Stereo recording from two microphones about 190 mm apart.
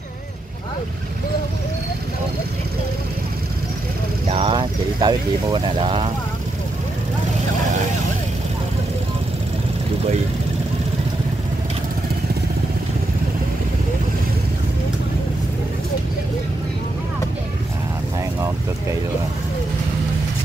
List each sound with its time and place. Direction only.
4.3 s speech: 30° right (ahead or behind)